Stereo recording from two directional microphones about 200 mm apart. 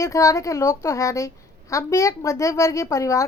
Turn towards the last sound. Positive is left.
turn(degrees=15)  # may be behind; listen again after turning